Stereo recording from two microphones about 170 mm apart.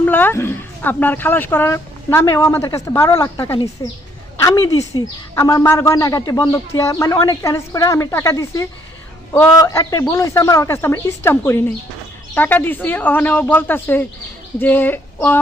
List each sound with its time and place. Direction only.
0.0 s speech: 10° left (ahead or behind)